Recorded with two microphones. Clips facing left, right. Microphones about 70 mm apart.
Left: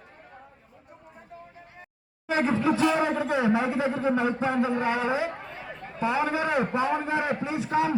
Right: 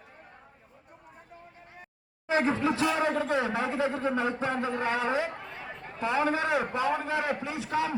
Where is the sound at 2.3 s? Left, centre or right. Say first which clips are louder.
Left 2 dB; centre.